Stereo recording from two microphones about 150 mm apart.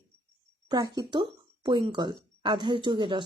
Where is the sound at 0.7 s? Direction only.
30° right (ahead or behind).